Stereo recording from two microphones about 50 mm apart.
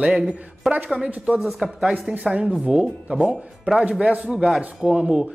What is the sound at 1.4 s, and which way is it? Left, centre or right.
Speech, centre.